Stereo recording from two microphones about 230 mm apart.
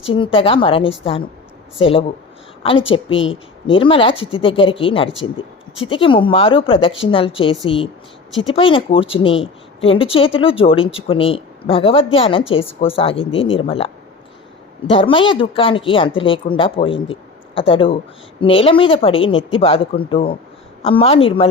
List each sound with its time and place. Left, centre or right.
0.1 s speech: left
8.5 s speech: left